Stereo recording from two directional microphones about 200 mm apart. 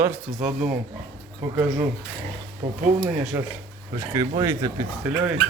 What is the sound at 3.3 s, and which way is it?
Speech, 10° right (ahead or behind).